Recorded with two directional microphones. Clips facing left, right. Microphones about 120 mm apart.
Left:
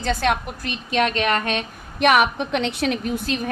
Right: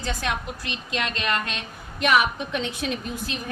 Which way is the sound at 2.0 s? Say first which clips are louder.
Left 4 dB; 60° left (ahead or behind).